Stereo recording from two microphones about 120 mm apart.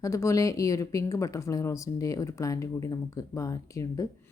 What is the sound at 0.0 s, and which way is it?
Speech, 25° left (ahead or behind).